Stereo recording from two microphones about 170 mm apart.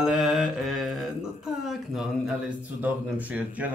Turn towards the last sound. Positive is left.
turn(degrees=-10)  # may be behind; listen again after turning